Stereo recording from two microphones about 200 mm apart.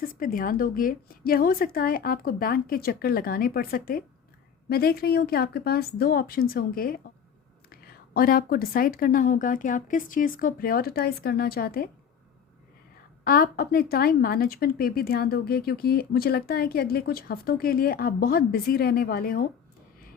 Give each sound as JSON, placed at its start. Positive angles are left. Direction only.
{"t": 0.0, "sound": "a woman's voice", "side_deg": 45}
{"t": 13.2, "sound": "a woman's voice", "side_deg": 50}